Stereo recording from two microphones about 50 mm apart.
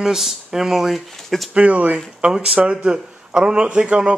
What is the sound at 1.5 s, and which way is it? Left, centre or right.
Speech, right.